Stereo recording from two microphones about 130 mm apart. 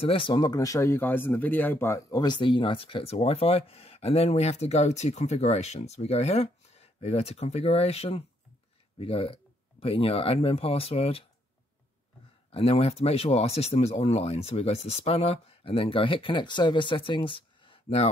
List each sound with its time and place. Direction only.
0.0 s speech: 45° left (ahead or behind)
12.4 s speech: 50° left (ahead or behind)